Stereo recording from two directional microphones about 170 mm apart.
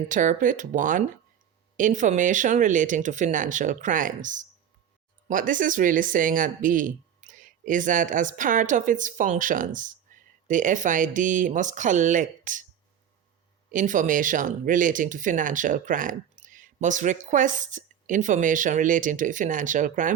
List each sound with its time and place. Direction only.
0.1 s speech: 50° right (ahead or behind)
13.7 s speech: 50° right (ahead or behind)